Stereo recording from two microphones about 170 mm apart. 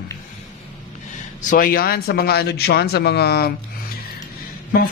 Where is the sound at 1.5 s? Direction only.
55° left (ahead or behind); by 3.5 s 70° left (ahead or behind).